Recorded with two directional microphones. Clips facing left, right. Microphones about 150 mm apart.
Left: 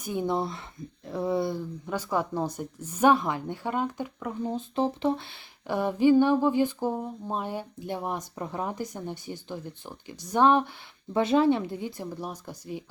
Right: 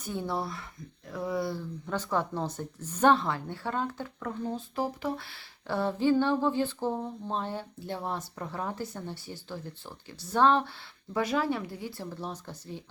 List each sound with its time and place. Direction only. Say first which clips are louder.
0.0 s speech: left 5 dB; 15° left (ahead or behind)